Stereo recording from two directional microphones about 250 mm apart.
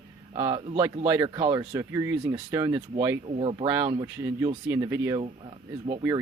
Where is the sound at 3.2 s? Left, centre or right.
Right.